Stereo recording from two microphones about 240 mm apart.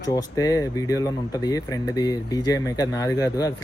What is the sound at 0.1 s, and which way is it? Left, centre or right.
Speech, centre.